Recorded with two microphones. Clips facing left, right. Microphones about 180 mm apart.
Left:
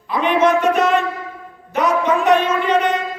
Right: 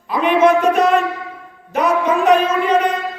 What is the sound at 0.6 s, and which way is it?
Music, 35° right (ahead or behind).